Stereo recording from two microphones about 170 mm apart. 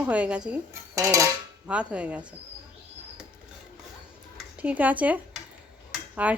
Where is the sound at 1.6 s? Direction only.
5° right (ahead or behind).